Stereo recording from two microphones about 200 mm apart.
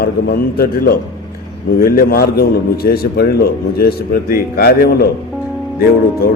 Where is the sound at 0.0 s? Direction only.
50° left (ahead or behind).